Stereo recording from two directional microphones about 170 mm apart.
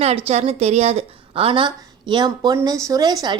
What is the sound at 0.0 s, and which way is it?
A woman's voice, 35° right (ahead or behind).